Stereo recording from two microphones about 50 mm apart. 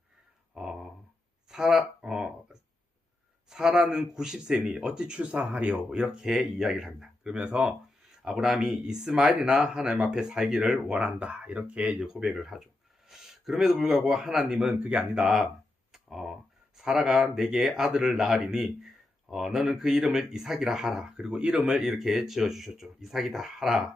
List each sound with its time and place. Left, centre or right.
0.5 s dog: centre
1.5 s a sound: centre
3.5 s speech: centre
8.2 s speech: centre; by 11.9 s right
11.9 s a man's voice: centre
14.8 s speech: right
15.9 s speech: centre